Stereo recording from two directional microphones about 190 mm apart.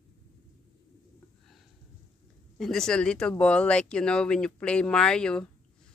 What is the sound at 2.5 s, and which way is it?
Speech, centre (ahead or behind).